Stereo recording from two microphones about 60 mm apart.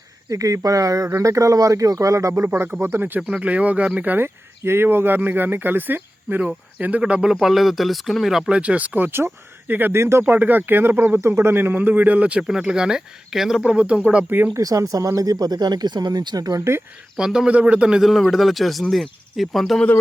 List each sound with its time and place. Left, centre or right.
0.3 s speech: right
3.2 s speech: right
4.6 s speech: right
7.0 s speech: centre
7.4 s speech: centre
8.4 s speech: centre
10.0 s speech: right
11.2 s speech: right
12.4 s speech: centre
13.6 s speech: right
14.5 s speech: right
17.2 s speech: centre
18.0 s speech: centre